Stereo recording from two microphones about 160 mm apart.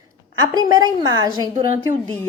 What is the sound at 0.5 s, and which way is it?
Speech, 25° right (ahead or behind).